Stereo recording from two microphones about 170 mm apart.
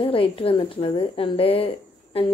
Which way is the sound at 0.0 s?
30° left (ahead or behind).